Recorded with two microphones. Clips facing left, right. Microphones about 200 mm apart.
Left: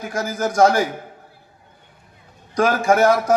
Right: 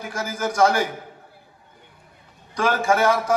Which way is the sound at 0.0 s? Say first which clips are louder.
Left 4 dB; 40° left (ahead or behind).